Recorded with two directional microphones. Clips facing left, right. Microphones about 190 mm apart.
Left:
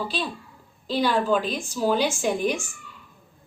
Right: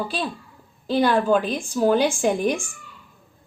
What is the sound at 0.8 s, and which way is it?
A woman's voice, 55° right (ahead or behind).